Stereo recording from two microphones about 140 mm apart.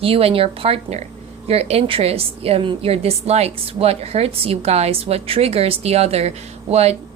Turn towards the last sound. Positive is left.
turn(degrees=-50)  # may be behind; listen again after turning